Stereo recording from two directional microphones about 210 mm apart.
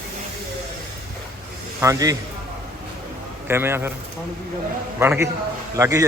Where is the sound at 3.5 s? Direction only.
10° right (ahead or behind).